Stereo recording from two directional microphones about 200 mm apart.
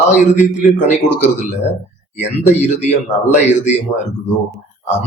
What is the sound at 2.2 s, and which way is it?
Speech, 35° left (ahead or behind).